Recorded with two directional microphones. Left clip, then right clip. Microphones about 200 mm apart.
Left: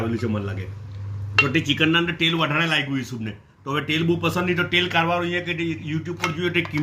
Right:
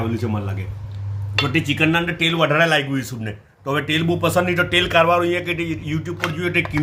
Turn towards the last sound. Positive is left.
turn(degrees=-40)  # may be behind; listen again after turning